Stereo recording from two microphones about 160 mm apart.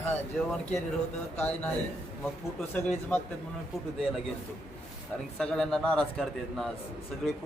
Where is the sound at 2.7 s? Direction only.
10° left (ahead or behind).